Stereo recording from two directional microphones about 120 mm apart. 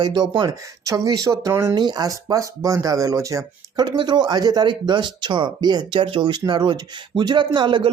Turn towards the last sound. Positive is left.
turn(degrees=-40)  # may be behind; listen again after turning